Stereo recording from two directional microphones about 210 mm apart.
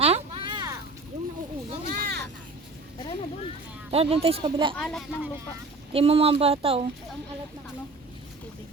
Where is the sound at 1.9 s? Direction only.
50° right (ahead or behind).